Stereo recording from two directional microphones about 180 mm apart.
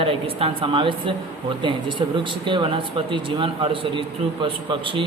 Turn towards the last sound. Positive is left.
turn(degrees=-30)  # may be behind; listen again after turning